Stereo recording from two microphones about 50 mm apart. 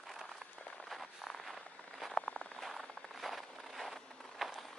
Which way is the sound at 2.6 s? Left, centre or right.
Centre.